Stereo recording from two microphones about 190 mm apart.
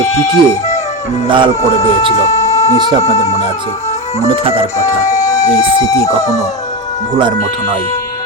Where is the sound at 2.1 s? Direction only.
35° left (ahead or behind).